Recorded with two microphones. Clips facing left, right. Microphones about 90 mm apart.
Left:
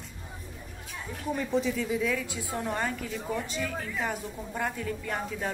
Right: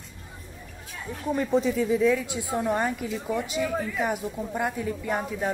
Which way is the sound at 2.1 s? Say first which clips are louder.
Right 6 dB; 20° right (ahead or behind).